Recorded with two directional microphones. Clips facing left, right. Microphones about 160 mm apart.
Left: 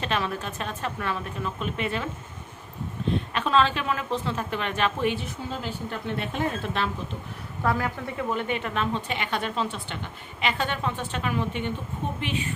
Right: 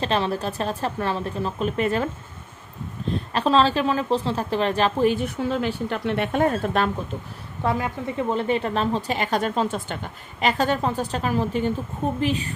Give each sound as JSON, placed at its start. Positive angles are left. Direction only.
{"t": 0.0, "sound": "a woman's voice", "side_deg": -30}
{"t": 3.3, "sound": "a woman's voice", "side_deg": -35}
{"t": 5.2, "sound": "a woman's voice", "side_deg": -70}
{"t": 6.3, "sound": "speech", "side_deg": -50}
{"t": 7.6, "sound": "a woman's voice", "side_deg": -20}